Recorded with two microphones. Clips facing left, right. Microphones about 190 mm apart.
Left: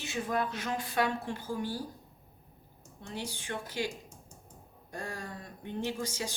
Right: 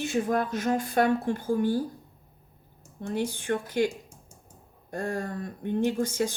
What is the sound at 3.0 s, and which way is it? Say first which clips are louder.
Speech: right 10 dB; 55° right (ahead or behind).